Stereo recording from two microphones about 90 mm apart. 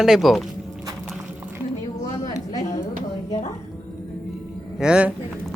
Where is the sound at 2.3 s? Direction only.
35° left (ahead or behind).